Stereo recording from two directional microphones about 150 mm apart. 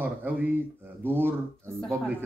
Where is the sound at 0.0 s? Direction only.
10° right (ahead or behind).